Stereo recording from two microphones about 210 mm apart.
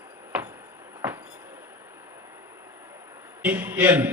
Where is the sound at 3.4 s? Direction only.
10° right (ahead or behind).